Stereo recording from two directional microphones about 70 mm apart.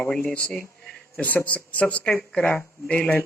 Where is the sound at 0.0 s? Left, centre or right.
Centre.